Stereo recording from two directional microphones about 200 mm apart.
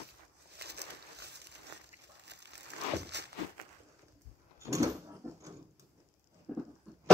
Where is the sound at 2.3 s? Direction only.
60° right (ahead or behind).